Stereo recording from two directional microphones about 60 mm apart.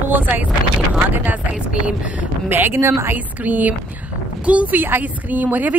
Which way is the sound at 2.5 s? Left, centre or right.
Right.